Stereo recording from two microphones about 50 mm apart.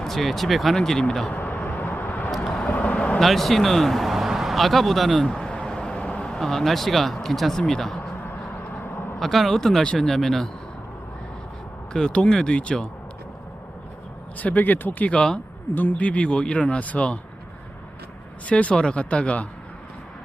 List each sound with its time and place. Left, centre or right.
0.0 s speech: centre
0.8 s speech: centre
1.3 s a sound: left
1.7 s vehicle: left
2.6 s vehicle: left
3.2 s speech: centre
5.3 s vehicle: centre
6.3 s speech: centre
9.1 s speech: centre
11.9 s a man's voice: centre
14.3 s a man's voice: left
18.4 s a man's voice: left